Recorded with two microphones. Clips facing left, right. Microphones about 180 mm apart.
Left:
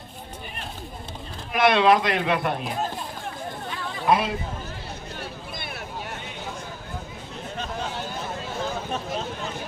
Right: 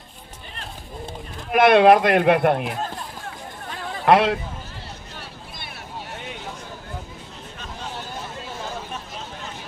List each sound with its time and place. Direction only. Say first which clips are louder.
1.5 s speech: right 5 dB; 55° right (ahead or behind)
4.0 s speech: right 5 dB; 75° right (ahead or behind)